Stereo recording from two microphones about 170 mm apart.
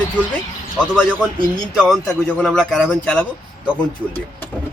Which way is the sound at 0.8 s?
5° left (ahead or behind).